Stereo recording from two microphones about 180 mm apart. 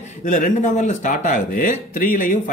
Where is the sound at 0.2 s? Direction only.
45° left (ahead or behind).